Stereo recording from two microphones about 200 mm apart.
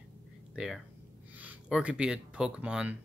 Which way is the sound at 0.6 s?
5° right (ahead or behind).